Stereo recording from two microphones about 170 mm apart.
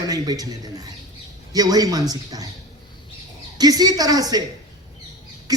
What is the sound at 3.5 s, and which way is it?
Speech, 20° right (ahead or behind).